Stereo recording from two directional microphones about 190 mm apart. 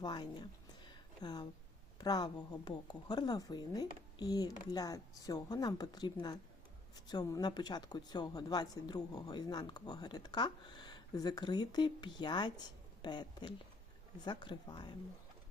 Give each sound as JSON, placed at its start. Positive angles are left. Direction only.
{"t": 0.0, "sound": "speech", "side_deg": 25}